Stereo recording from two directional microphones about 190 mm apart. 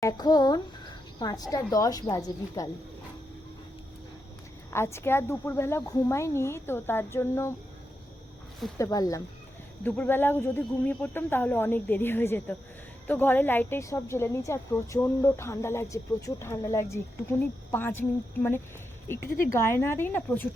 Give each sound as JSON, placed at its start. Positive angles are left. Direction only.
{"t": 0.0, "sound": "a child's voice", "side_deg": 20}
{"t": 4.7, "sound": "a woman's voice", "side_deg": 15}
{"t": 8.8, "sound": "a woman's voice", "side_deg": 20}
{"t": 19.0, "sound": "a woman's voice", "side_deg": 10}